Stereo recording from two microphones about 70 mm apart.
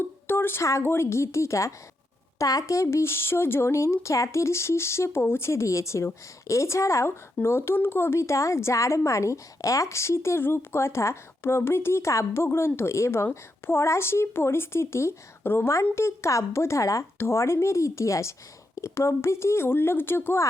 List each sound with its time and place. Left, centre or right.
0.0 s a woman's voice: left
7.4 s a woman's voice: left